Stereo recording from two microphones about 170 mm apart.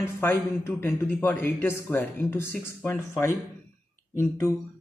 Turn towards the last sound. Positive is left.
turn(degrees=15)  # may be behind; listen again after turning